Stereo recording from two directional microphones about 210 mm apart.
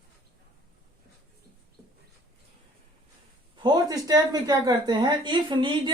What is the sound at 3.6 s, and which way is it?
A woman's voice, 20° right (ahead or behind).